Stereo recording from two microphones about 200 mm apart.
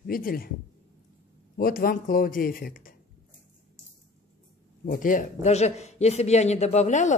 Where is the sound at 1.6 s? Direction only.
45° left (ahead or behind).